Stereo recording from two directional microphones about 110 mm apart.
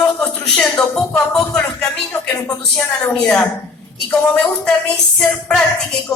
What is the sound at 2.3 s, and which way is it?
Speech, 35° left (ahead or behind).